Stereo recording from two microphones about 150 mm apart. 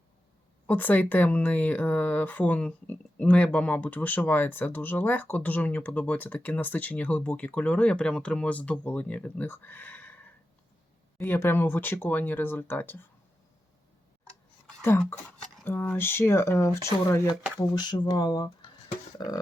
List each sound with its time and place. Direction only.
0.7 s speech: 10° left (ahead or behind)
14.8 s speech: 15° left (ahead or behind)
17.7 s speech: 30° left (ahead or behind)